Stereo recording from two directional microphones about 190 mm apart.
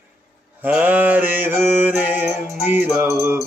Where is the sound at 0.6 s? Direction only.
10° right (ahead or behind).